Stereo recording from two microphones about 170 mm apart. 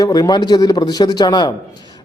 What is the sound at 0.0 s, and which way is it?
A man's voice, 20° left (ahead or behind).